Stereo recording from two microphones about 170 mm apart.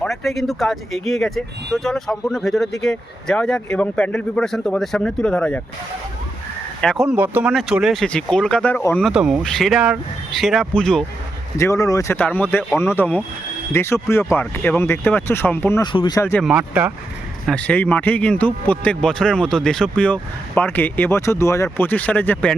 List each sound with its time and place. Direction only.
0.0 s speech: centre (ahead or behind)
6.8 s speech: centre (ahead or behind)
7.2 s speech: 10° right (ahead or behind); by 9.0 s 10° left (ahead or behind)
9.0 s speech: 5° right (ahead or behind)
11.5 s a man's voice: 20° left (ahead or behind)
15.8 s speech: 25° left (ahead or behind)
16.4 s speech: 5° right (ahead or behind)
17.4 s a man's voice: 5° left (ahead or behind)